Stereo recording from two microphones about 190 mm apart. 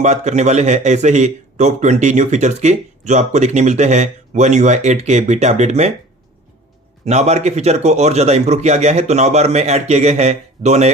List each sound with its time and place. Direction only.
0.0 s speech: 40° right (ahead or behind)
7.0 s speech: 35° right (ahead or behind)